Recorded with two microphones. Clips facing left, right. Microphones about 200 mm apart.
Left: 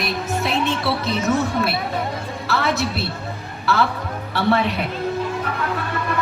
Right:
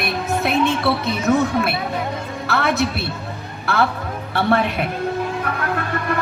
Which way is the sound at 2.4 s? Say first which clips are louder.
Right 2 dB; 55° right (ahead or behind).